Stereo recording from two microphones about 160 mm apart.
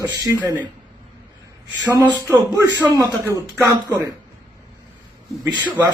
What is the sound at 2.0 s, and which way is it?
A man's voice, 25° right (ahead or behind).